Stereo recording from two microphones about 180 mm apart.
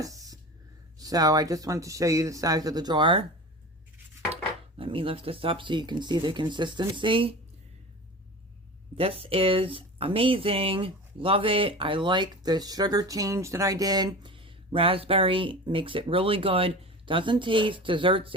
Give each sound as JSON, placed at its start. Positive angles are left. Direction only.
{"t": 0.0, "sound": "a sound", "side_deg": -20}
{"t": 0.9, "sound": "speech", "side_deg": -20}
{"t": 4.8, "sound": "speech", "side_deg": -30}
{"t": 9.0, "sound": "speech", "side_deg": -30}